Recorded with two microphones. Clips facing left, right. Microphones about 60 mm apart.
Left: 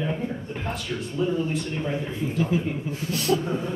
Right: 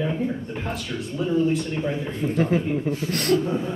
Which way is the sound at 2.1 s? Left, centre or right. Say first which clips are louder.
Right 4 dB; right.